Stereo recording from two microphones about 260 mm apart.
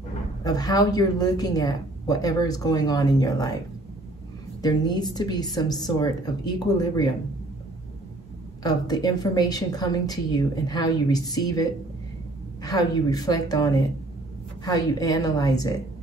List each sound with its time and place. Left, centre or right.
0.4 s a woman's voice: centre
4.6 s a woman's voice: centre
8.6 s a woman's voice: centre
12.6 s a woman's voice: centre